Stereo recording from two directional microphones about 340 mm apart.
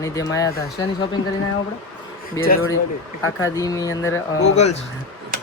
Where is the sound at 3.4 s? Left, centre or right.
Centre.